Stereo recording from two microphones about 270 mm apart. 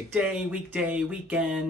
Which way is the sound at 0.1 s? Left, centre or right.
Centre.